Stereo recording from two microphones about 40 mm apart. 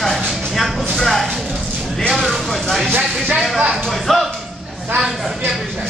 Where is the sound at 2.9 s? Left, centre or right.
Right.